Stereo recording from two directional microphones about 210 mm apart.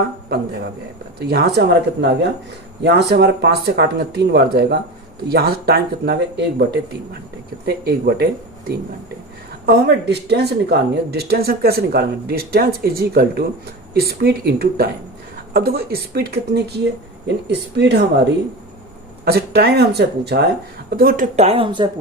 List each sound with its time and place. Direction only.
0.3 s speech: 50° right (ahead or behind)
9.6 s speech: 55° right (ahead or behind)
19.2 s speech: 50° right (ahead or behind)
21.3 s speech: 30° right (ahead or behind)